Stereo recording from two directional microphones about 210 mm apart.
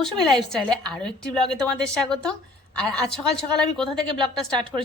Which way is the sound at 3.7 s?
Centre (ahead or behind).